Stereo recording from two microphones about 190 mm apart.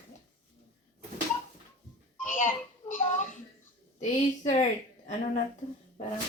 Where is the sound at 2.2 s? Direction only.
45° left (ahead or behind).